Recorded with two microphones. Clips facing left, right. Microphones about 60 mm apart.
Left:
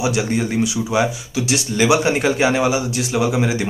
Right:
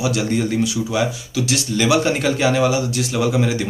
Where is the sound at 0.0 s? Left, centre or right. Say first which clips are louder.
Even; centre.